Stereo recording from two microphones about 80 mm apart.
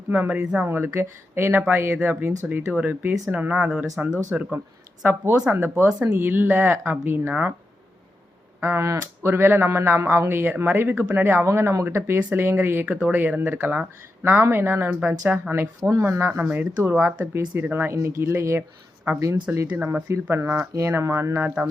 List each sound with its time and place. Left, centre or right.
0.1 s speech: centre
5.0 s speech: right
5.9 s speech: centre
8.8 s speech: right
15.8 s speech: right